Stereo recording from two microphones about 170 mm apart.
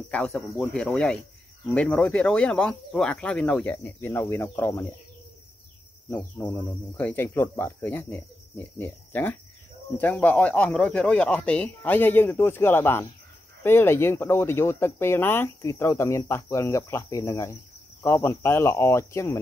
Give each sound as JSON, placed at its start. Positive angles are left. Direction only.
{"t": 0.1, "sound": "speech", "side_deg": 5}
{"t": 6.0, "sound": "speech", "side_deg": 10}